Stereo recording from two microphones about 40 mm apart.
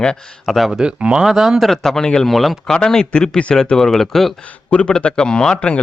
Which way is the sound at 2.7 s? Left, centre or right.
Centre.